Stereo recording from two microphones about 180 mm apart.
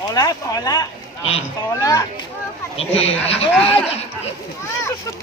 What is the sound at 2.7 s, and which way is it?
Speech, 35° left (ahead or behind).